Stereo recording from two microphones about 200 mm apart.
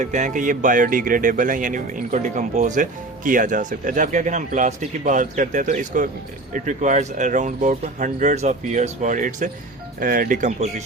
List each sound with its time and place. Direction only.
0.0 s speech: 35° right (ahead or behind)